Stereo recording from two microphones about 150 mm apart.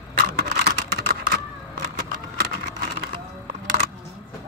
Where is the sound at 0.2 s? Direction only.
90° right.